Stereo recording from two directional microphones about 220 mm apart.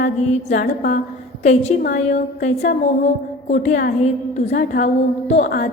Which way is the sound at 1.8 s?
40° left (ahead or behind).